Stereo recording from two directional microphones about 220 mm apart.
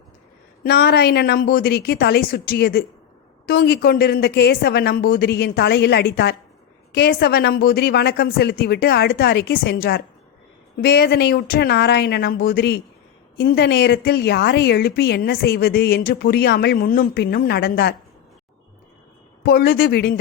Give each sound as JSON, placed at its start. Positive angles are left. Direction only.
{"t": 0.6, "sound": "a woman's voice", "side_deg": 45}
{"t": 19.4, "sound": "a woman's voice", "side_deg": 45}